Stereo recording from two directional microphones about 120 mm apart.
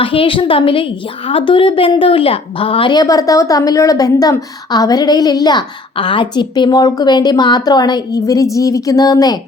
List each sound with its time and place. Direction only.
0.0 s a woman's voice: 45° left (ahead or behind)